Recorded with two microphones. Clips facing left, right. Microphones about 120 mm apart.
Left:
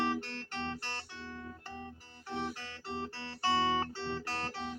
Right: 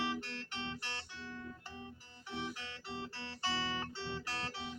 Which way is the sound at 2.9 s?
50° left (ahead or behind).